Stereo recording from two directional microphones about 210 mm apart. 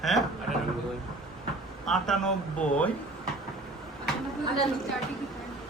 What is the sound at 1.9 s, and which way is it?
A woman's voice, 5° left (ahead or behind).